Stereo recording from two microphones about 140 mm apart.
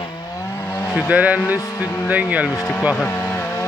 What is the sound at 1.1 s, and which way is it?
Speech, 10° right (ahead or behind).